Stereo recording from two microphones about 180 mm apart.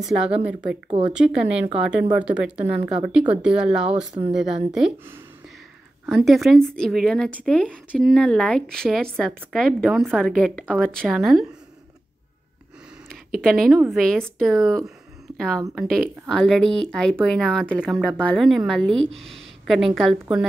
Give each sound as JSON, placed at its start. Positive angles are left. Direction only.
{"t": 0.4, "sound": "speech", "side_deg": -5}
{"t": 0.8, "sound": "speech", "side_deg": -35}
{"t": 1.1, "sound": "a woman's voice", "side_deg": -5}
{"t": 6.0, "sound": "a woman's voice", "side_deg": 0}
{"t": 13.1, "sound": "a woman's voice", "side_deg": 0}